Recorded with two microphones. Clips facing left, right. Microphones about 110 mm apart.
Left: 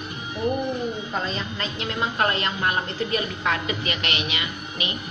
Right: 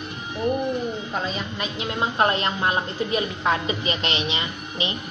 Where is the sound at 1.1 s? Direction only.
5° right (ahead or behind).